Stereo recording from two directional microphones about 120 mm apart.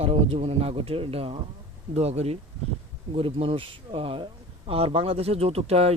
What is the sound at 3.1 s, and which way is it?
Speech, 50° right (ahead or behind).